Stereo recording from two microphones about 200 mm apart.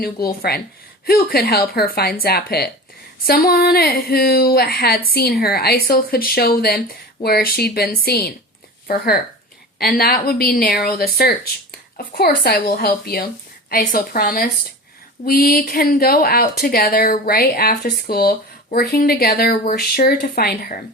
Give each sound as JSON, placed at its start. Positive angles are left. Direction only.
{"t": 0.0, "sound": "a woman's voice", "side_deg": 50}